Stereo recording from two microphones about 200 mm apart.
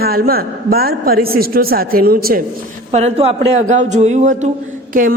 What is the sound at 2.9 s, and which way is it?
A man's voice, 30° right (ahead or behind).